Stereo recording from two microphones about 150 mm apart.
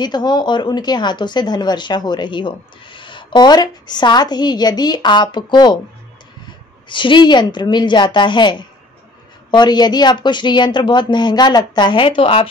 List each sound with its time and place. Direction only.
0.0 s a woman's voice: 30° left (ahead or behind)